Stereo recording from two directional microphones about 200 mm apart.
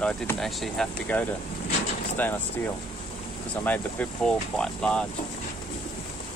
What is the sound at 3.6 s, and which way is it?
Speech, 10° left (ahead or behind).